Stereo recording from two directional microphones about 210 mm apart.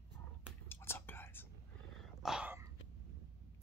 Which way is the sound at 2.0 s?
5° right (ahead or behind).